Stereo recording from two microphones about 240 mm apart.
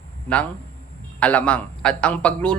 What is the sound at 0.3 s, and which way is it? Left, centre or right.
Speech, centre.